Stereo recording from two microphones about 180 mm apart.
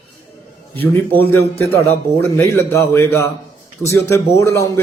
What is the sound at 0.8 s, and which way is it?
A man's voice, 10° left (ahead or behind).